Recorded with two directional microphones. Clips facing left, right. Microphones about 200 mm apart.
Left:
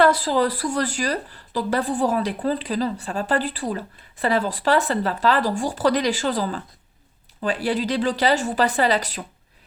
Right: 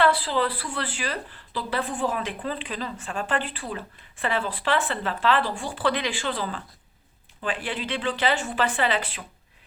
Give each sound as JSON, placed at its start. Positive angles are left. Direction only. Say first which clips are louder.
{"t": 0.0, "sound": "speech", "louder": "left 4 dB", "side_deg": 40}